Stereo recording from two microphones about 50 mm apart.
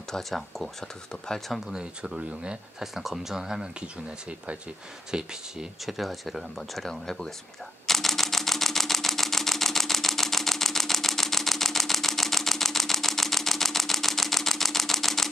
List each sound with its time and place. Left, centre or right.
0.1 s speech: centre
1.7 s speech: centre
2.8 s speech: centre
5.1 s speech: centre
7.8 s camera: centre